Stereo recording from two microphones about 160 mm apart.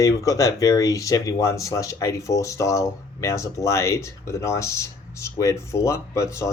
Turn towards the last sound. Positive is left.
turn(degrees=20)  # may be behind; listen again after turning